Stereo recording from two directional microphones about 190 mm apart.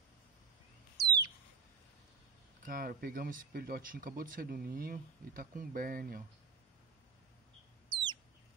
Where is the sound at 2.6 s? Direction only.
50° right (ahead or behind).